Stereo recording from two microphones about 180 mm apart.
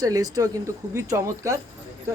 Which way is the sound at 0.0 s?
20° right (ahead or behind).